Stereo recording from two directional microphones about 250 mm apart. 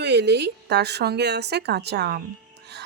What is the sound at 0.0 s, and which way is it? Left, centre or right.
A woman's voice, right.